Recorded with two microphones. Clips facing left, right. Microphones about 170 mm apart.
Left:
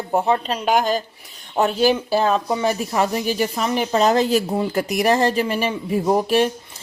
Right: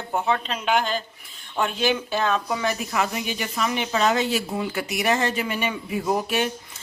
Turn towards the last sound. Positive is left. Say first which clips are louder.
# left 6 dB
turn(degrees=35)  # may be behind; listen again after turning